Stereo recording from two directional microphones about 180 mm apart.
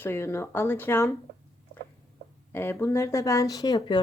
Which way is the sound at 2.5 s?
15° left (ahead or behind).